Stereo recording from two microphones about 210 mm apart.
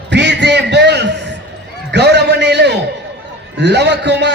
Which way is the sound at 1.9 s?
55° right (ahead or behind).